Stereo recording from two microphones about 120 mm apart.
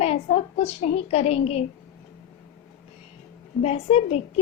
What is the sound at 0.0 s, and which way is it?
A woman's voice, 60° left (ahead or behind).